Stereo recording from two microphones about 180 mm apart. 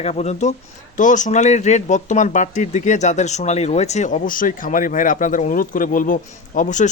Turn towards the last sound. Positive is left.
turn(degrees=45)  # may be behind; listen again after turning